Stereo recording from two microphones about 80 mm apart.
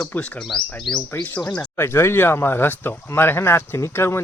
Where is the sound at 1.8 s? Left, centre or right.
Left.